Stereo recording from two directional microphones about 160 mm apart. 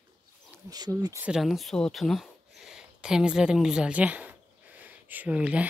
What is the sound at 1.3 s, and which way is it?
Speech, centre (ahead or behind).